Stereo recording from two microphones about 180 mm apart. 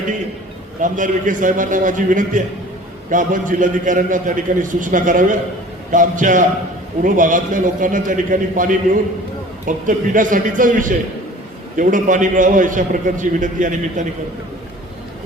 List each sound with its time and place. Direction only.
0.8 s a man's voice: 45° right (ahead or behind)